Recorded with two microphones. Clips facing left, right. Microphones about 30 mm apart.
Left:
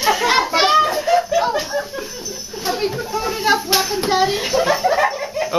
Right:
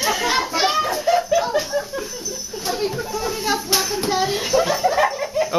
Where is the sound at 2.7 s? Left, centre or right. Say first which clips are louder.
Left 2 dB; centre.